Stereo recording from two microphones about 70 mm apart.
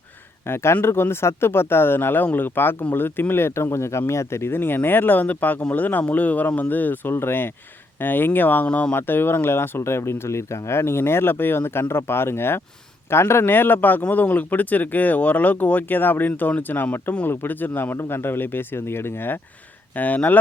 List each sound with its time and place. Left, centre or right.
0.4 s speech: left